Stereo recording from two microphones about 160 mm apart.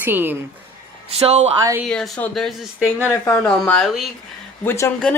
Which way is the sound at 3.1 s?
15° left (ahead or behind).